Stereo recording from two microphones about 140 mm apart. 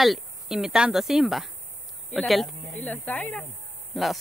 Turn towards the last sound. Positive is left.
turn(degrees=0)  # may be behind; listen again after turning